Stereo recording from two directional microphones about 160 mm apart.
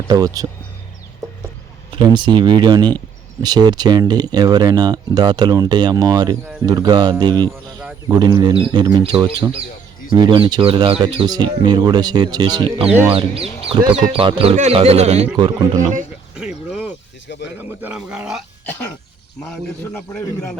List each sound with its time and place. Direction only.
0.1 s speech: 20° right (ahead or behind)
1.9 s speech: 30° right (ahead or behind)
15.4 s speech: 25° right (ahead or behind)
15.8 s speech: 55° right (ahead or behind)
16.3 s a sound: 5° right (ahead or behind)
17.2 s speech: 90° left
17.6 s speech: 10° right (ahead or behind)
19.5 s a man's voice: 5° left (ahead or behind)